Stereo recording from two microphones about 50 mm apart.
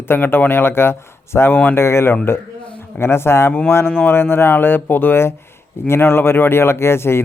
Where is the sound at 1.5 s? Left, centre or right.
Left.